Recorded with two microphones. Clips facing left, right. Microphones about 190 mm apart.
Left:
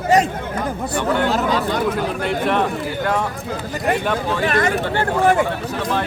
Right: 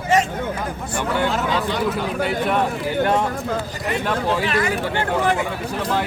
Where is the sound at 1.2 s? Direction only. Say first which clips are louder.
Left 3 dB; 40° left (ahead or behind).